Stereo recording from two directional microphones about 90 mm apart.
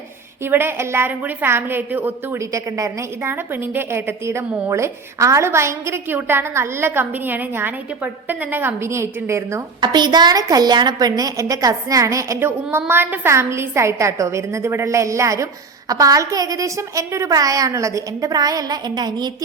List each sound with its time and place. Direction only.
0.4 s a woman's voice: 25° right (ahead or behind)
2.4 s a woman's voice: 35° right (ahead or behind)
3.2 s a woman's voice: 25° right (ahead or behind)
9.8 s a woman's voice: 55° right (ahead or behind); by 12.5 s 35° right (ahead or behind)
12.9 s a woman's voice: 25° right (ahead or behind); by 19.3 s 50° right (ahead or behind)